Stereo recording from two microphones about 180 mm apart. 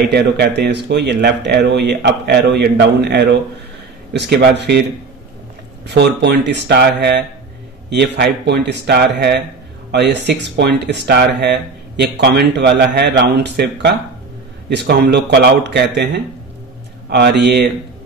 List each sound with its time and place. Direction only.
0.1 s speech: 65° right (ahead or behind)
5.9 s speech: 70° right (ahead or behind)
17.1 s speech: 70° right (ahead or behind)